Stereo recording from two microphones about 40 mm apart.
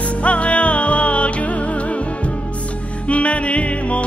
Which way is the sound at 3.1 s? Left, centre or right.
Left.